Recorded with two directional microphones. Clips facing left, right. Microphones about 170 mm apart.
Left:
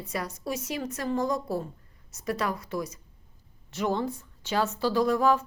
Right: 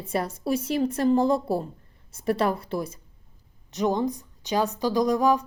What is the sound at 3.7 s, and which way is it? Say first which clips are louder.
Speech: right 4 dB; 15° right (ahead or behind).